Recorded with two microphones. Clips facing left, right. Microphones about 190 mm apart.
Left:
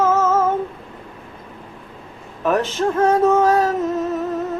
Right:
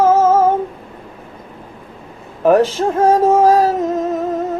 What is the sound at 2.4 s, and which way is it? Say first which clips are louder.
Speech: right 6 dB; 35° right (ahead or behind).